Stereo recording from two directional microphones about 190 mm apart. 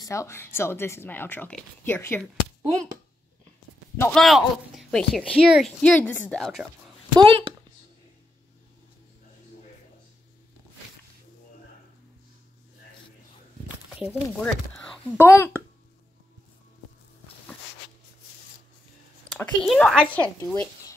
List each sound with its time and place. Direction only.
0.0 s a woman's voice: 15° left (ahead or behind)
3.9 s speech: 10° left (ahead or behind)
4.2 s speech: centre (ahead or behind)
7.2 s speech: 30° right (ahead or behind)
13.9 s speech: 5° right (ahead or behind)
14.4 s a woman's voice: 5° left (ahead or behind)
19.3 s speech: 5° left (ahead or behind)